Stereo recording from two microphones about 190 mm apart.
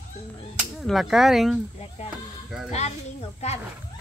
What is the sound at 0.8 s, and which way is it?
Speech, centre (ahead or behind).